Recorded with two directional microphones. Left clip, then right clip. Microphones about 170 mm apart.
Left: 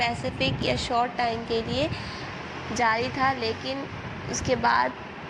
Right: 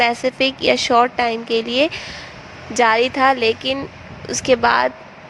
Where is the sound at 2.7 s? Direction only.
55° right (ahead or behind).